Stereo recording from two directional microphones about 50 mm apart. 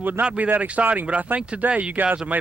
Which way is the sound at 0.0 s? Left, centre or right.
Right.